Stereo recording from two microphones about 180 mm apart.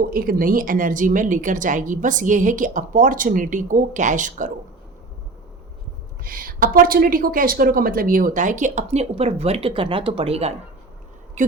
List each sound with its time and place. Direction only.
0.1 s speech: 50° right (ahead or behind)
6.2 s speech: 50° right (ahead or behind)